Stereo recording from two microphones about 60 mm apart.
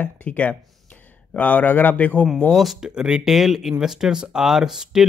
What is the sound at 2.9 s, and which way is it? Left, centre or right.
Speech, centre.